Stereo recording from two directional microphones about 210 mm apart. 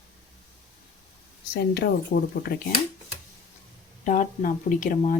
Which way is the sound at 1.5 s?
50° left (ahead or behind).